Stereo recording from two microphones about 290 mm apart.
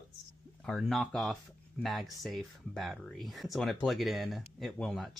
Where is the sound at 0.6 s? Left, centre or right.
Centre.